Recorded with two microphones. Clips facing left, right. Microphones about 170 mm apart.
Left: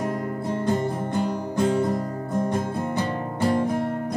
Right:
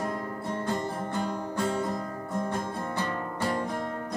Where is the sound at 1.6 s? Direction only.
35° left (ahead or behind).